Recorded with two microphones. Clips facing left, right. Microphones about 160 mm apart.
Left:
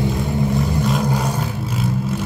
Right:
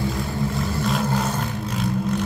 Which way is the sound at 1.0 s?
10° left (ahead or behind).